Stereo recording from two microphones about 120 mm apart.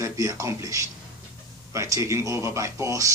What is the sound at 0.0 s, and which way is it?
Speech, 25° right (ahead or behind).